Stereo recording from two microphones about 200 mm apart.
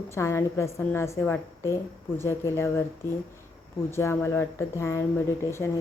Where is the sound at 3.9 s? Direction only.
10° left (ahead or behind).